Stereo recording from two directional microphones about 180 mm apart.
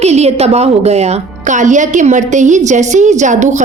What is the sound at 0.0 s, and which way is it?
A woman's voice, 35° right (ahead or behind).